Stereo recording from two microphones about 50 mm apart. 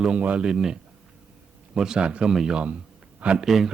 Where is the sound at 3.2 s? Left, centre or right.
Right.